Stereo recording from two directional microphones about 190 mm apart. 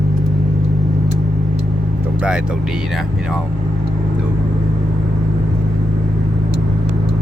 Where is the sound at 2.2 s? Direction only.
5° right (ahead or behind).